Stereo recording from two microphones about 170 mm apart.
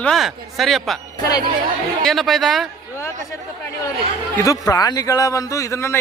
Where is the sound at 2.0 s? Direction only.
Centre (ahead or behind).